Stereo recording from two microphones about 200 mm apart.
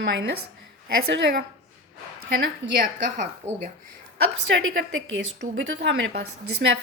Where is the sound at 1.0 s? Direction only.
50° right (ahead or behind).